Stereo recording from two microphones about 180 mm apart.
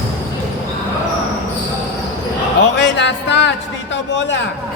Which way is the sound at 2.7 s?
80° left.